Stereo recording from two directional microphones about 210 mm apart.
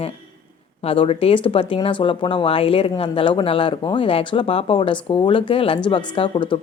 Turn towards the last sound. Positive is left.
turn(degrees=25)  # may be behind; listen again after turning